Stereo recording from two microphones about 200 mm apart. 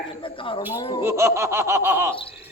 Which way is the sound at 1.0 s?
15° right (ahead or behind).